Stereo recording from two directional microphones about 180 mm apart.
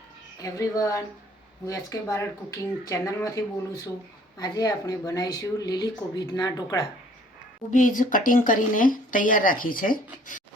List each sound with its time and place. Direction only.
0.3 s a woman's voice: 20° left (ahead or behind)
7.7 s speech: 45° left (ahead or behind)